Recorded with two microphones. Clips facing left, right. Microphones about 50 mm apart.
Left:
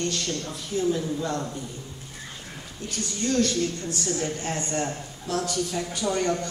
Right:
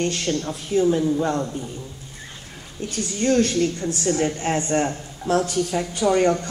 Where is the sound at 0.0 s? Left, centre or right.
Right.